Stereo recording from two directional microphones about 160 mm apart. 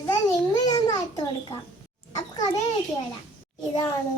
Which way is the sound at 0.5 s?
25° left (ahead or behind).